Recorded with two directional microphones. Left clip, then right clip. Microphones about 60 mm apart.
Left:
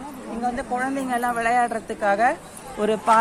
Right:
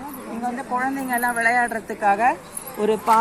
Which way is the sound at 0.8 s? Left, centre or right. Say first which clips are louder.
Right 4 dB; centre.